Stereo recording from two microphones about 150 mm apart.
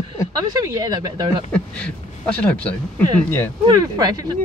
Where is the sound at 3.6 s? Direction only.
25° right (ahead or behind).